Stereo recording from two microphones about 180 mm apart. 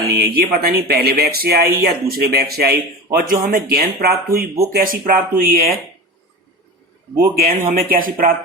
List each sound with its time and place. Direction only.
0.1 s speech: 60° right (ahead or behind)
7.3 s speech: 50° right (ahead or behind)